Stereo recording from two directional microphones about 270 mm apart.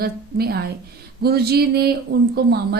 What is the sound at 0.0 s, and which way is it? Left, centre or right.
A woman's voice, right.